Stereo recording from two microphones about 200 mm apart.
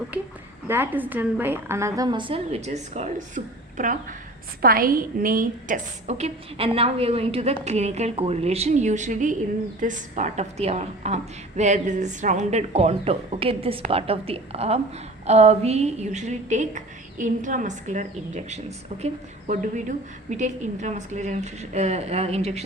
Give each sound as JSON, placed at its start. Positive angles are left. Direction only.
{"t": 0.7, "sound": "a woman's voice", "side_deg": -10}